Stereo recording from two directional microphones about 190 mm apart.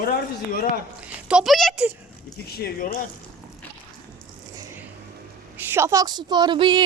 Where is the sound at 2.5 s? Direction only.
50° left (ahead or behind).